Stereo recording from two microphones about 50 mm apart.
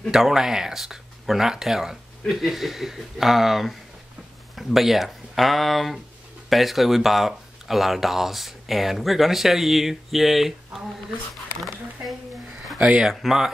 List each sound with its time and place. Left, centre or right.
0.1 s speech: centre
12.7 s speech: right
13.0 s speech: centre